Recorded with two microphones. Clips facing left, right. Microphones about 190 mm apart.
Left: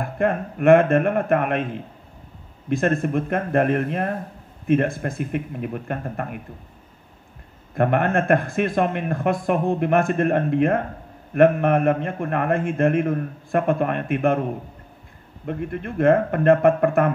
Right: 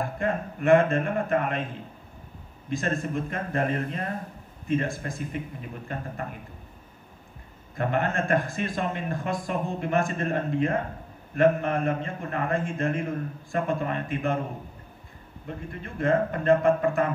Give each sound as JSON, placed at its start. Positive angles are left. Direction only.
{"t": 0.2, "sound": "speech", "side_deg": 60}
{"t": 2.7, "sound": "speech", "side_deg": 60}
{"t": 7.7, "sound": "speech", "side_deg": 60}
{"t": 15.4, "sound": "speech", "side_deg": 60}